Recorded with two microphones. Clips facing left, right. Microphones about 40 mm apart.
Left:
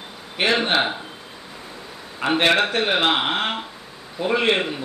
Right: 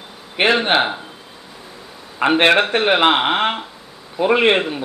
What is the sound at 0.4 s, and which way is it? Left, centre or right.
Speech, right.